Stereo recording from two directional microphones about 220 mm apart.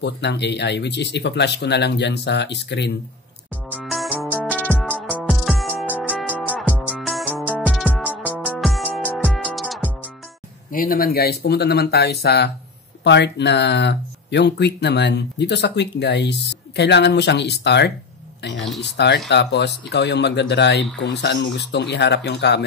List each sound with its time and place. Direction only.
0.0 s speech: 50° left (ahead or behind)
3.7 s music: centre (ahead or behind)
10.7 s speech: 40° left (ahead or behind)